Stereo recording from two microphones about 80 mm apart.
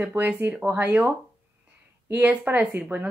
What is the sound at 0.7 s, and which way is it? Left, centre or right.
Speech, right.